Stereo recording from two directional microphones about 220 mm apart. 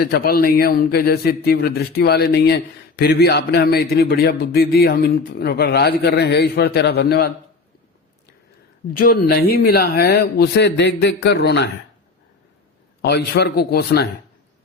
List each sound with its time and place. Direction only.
0.0 s a man's voice: 45° left (ahead or behind)
8.9 s a man's voice: 40° left (ahead or behind)
13.0 s a man's voice: 50° left (ahead or behind)